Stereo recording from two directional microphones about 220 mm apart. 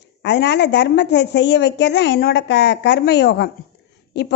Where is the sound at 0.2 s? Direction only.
50° left (ahead or behind).